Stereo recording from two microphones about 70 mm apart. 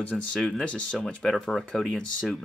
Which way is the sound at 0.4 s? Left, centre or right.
Centre.